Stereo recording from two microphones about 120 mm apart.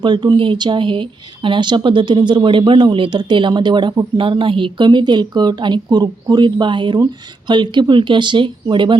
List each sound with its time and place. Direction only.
0.0 s speech: 40° right (ahead or behind)